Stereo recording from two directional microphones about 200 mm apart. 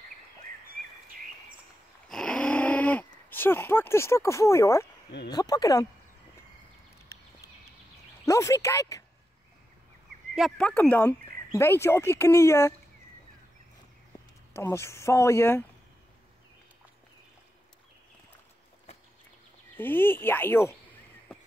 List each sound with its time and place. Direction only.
2.0 s a sound: 5° left (ahead or behind)
5.3 s speech: 20° left (ahead or behind)
7.1 s a sound: 15° left (ahead or behind)
8.3 s speech: 15° left (ahead or behind)
10.3 s speech: centre (ahead or behind)
14.5 s speech: 15° left (ahead or behind)
19.8 s speech: 10° left (ahead or behind)